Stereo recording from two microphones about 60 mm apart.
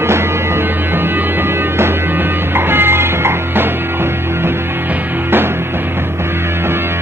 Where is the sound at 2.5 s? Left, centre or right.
Right.